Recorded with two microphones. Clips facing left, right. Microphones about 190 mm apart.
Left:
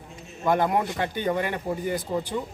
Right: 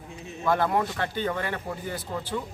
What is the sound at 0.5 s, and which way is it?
Speech, 15° left (ahead or behind).